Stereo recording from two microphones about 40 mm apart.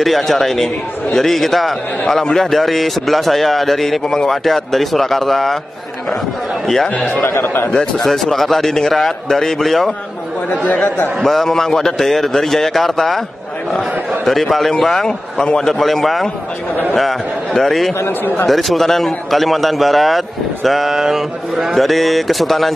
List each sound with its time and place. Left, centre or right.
0.0 s a man's voice: centre
6.6 s a man's voice: centre
6.9 s speech: left
7.2 s speech: left
8.0 s a man's voice: centre
10.5 s speech: left
11.2 s a man's voice: centre
14.7 s a man's voice: centre
15.7 s a man's voice: centre
17.9 s a man's voice: left
18.5 s a man's voice: centre
21.7 s a man's voice: centre